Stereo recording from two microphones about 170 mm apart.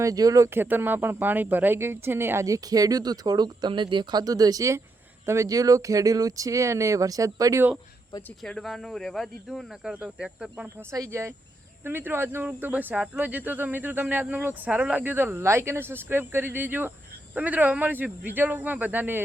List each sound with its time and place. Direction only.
0.0 s speech: 20° right (ahead or behind)
8.4 s speech: centre (ahead or behind)
10.9 s speech: 20° right (ahead or behind)